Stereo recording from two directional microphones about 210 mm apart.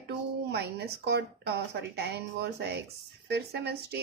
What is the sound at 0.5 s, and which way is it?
A woman's voice, 50° right (ahead or behind).